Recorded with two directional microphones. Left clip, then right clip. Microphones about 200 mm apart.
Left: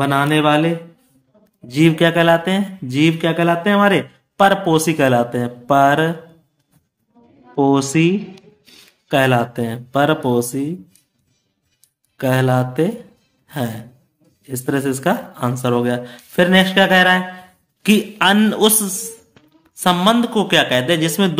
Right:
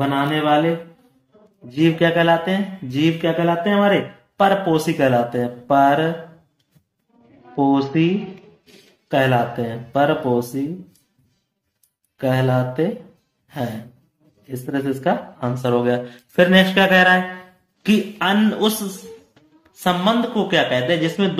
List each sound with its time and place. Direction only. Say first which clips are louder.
0.0 s mantra: left 4 dB; 40° left (ahead or behind)
1.7 s speech: left 3 dB; 35° left (ahead or behind)
7.5 s speech: left 3 dB; 35° left (ahead or behind)
9.1 s speech: left 2 dB; 35° left (ahead or behind)
12.2 s speech: left 2 dB; 35° left (ahead or behind)
14.5 s speech: left 4 dB; 35° left (ahead or behind)
15.7 s speech: right 3 dB; 20° left (ahead or behind)
17.8 s speech: left 5 dB; 35° left (ahead or behind)